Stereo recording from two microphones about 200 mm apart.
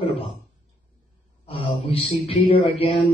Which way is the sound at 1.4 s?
30° left (ahead or behind).